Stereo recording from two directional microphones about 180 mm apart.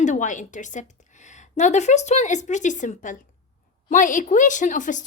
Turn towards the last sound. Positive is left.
turn(degrees=45)  # may be behind; listen again after turning